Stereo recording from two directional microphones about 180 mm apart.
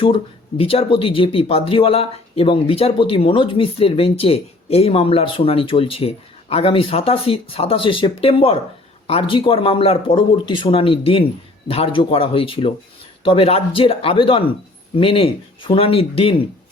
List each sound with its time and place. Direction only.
0.0 s speech: 30° left (ahead or behind)